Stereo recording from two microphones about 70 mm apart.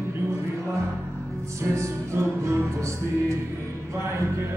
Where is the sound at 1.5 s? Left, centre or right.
Right.